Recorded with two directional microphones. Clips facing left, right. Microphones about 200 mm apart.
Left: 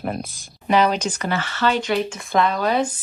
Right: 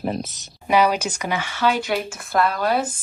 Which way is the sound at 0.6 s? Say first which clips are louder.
Even; 10° right (ahead or behind).